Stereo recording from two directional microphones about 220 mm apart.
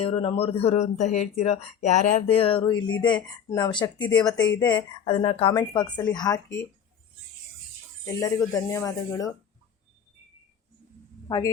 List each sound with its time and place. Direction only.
0.0 s speech: 25° left (ahead or behind)
3.1 s speech: 5° left (ahead or behind)
3.6 s speech: 20° left (ahead or behind)
8.0 s speech: 15° left (ahead or behind)
11.3 s speech: 15° left (ahead or behind)